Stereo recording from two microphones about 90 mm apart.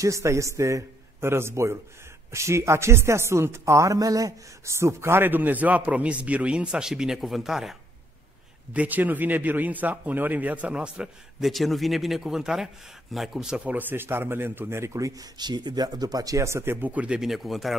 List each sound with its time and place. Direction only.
0.0 s speech: 35° right (ahead or behind); by 7.7 s 5° right (ahead or behind)
8.7 s a man's voice: 20° right (ahead or behind)
13.7 s speech: 25° right (ahead or behind); by 15.2 s 40° right (ahead or behind)
15.3 s speech: 55° right (ahead or behind); by 17.2 s 15° right (ahead or behind)
17.2 s speech: centre (ahead or behind)